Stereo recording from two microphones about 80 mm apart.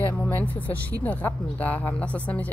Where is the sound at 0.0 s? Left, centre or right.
Left.